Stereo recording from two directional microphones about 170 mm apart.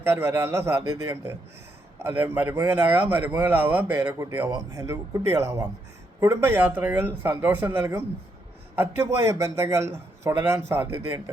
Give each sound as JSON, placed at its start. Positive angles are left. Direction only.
{"t": 0.1, "sound": "speech", "side_deg": -15}